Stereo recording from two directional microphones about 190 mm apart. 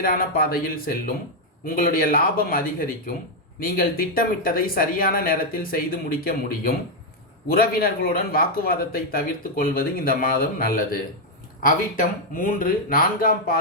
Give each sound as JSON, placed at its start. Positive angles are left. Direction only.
{"t": 0.0, "sound": "speech", "side_deg": 50}